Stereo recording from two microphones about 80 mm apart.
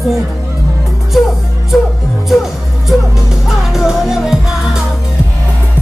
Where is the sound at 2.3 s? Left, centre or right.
Centre.